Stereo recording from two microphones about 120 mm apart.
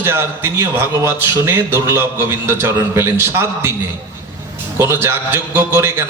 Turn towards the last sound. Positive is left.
turn(degrees=-20)  # may be behind; listen again after turning